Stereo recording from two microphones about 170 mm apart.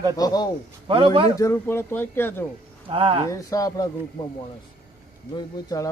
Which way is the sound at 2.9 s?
35° right (ahead or behind).